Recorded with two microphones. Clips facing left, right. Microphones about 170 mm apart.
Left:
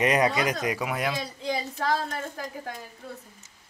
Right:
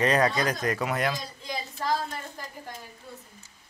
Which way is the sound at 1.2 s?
70° left (ahead or behind).